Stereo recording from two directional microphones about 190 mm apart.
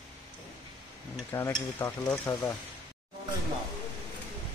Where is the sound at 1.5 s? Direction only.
10° left (ahead or behind).